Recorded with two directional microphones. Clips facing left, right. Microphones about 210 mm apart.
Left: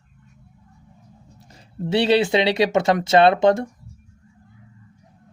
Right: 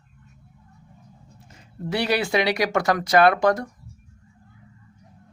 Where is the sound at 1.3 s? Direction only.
35° left (ahead or behind).